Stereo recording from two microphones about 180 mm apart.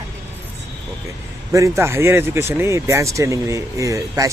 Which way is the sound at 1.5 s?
15° right (ahead or behind).